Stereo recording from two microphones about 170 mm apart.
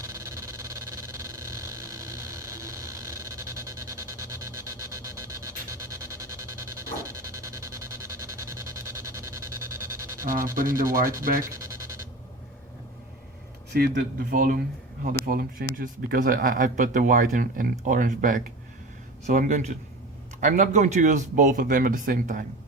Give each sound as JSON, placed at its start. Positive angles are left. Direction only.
{"t": 0.0, "sound": "a sound", "side_deg": -20}
{"t": 10.2, "sound": "speech", "side_deg": -55}
{"t": 11.5, "sound": "music", "side_deg": -20}
{"t": 13.7, "sound": "speech", "side_deg": -65}